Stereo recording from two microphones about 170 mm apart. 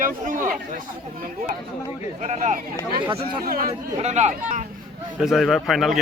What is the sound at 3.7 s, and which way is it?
Speech, 40° right (ahead or behind).